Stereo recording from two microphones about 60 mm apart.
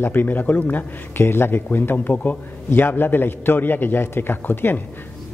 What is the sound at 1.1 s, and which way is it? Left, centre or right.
Speech, left.